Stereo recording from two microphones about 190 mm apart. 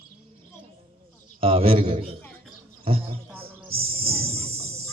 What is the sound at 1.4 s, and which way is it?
Speech, 30° right (ahead or behind).